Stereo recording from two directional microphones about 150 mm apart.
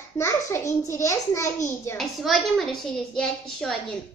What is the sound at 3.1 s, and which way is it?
Hands, 5° left (ahead or behind).